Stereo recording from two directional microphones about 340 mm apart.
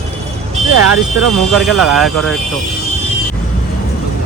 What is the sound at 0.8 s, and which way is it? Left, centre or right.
Speech, right.